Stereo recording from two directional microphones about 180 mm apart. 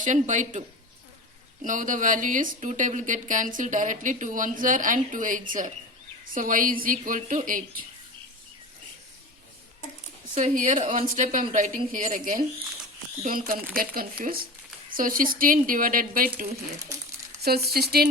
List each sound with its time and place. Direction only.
0.0 s a woman's voice: 45° right (ahead or behind)
1.6 s a woman's voice: 45° right (ahead or behind)
10.3 s a woman's voice: 45° right (ahead or behind); by 18.1 s 60° right (ahead or behind)